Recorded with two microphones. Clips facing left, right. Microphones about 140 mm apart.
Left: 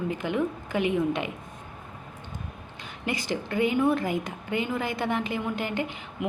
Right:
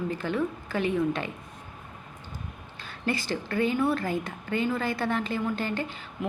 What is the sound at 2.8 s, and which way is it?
Speech, 15° left (ahead or behind).